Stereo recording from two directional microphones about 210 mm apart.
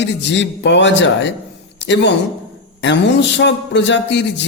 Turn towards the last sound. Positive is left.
turn(degrees=55)  # may be behind; listen again after turning